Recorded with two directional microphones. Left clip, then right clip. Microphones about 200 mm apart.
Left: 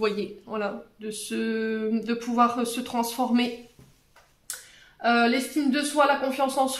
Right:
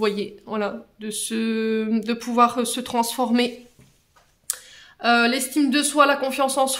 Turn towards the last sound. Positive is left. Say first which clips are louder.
# right 3 dB
turn(degrees=-45)  # may be behind; listen again after turning